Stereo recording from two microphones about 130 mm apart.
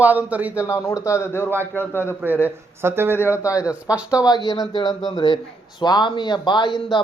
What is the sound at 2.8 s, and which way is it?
Speech, 15° right (ahead or behind).